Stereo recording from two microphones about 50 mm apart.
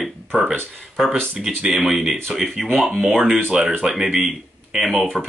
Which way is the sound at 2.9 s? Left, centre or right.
Centre.